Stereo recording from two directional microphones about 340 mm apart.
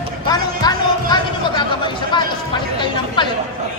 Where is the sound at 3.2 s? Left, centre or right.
Centre.